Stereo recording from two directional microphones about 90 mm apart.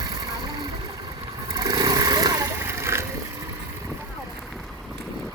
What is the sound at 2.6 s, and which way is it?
Splash, 30° right (ahead or behind).